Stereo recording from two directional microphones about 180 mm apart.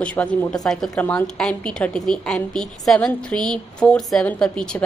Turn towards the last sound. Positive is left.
turn(degrees=5)  # may be behind; listen again after turning